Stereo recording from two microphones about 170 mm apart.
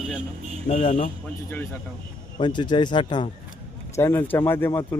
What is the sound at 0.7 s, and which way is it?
Speech, 45° left (ahead or behind).